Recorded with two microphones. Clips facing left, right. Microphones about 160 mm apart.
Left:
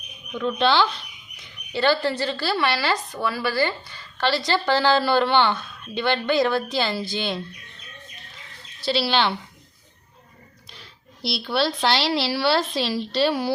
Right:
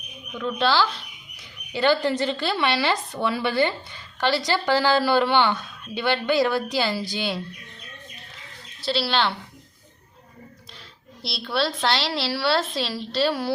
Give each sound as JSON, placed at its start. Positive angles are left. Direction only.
{"t": 0.3, "sound": "a woman's voice", "side_deg": -5}
{"t": 1.7, "sound": "a woman's voice", "side_deg": -15}
{"t": 8.8, "sound": "a woman's voice", "side_deg": 0}
{"t": 11.2, "sound": "a woman's voice", "side_deg": 0}